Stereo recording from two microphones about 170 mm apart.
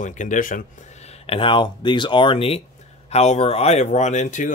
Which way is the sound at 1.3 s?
30° left (ahead or behind).